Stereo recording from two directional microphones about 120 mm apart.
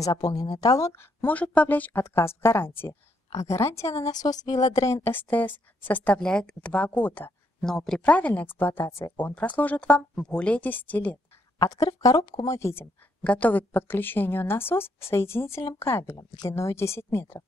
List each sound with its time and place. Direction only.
0.0 s a woman's voice: 30° left (ahead or behind); by 7.3 s 15° left (ahead or behind)
7.6 s a woman's voice: 5° left (ahead or behind)
11.5 s speech: 30° left (ahead or behind)
13.2 s a woman's voice: 10° left (ahead or behind)